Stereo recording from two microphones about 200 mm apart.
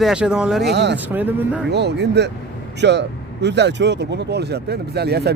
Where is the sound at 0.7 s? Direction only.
60° right (ahead or behind).